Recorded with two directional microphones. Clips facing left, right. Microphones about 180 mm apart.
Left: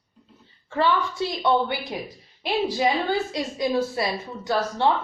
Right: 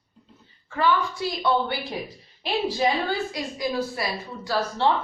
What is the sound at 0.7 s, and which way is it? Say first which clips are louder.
A woman's voice: left 1 dB; 30° left (ahead or behind).